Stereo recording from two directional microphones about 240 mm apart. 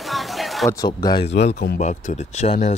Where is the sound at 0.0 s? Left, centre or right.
Centre.